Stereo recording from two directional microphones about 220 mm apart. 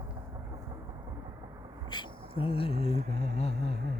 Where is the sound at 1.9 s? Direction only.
20° left (ahead or behind).